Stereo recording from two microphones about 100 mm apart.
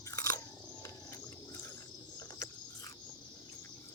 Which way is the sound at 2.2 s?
35° left (ahead or behind).